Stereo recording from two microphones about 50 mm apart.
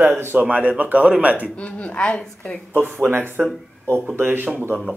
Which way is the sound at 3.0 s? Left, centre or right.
Right.